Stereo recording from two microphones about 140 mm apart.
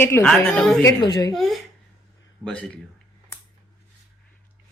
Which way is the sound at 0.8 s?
30° left (ahead or behind).